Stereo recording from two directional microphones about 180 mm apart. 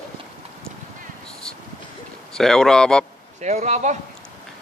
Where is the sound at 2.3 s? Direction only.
5° left (ahead or behind).